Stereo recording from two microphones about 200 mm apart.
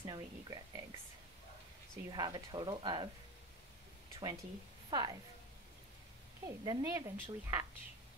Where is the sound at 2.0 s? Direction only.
20° right (ahead or behind).